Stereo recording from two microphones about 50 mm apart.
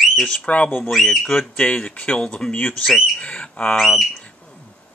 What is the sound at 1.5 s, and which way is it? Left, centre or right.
Speech, left.